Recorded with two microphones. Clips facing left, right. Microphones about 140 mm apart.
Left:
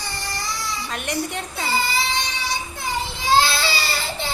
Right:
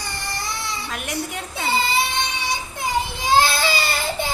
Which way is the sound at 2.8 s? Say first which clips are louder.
Right 3 dB; 15° right (ahead or behind).